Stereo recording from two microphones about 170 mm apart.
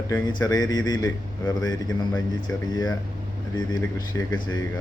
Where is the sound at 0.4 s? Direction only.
25° left (ahead or behind).